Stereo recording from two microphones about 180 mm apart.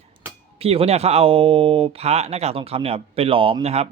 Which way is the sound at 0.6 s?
35° right (ahead or behind).